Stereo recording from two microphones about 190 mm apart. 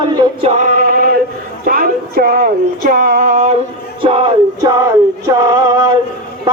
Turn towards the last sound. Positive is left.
turn(degrees=-20)  # may be behind; listen again after turning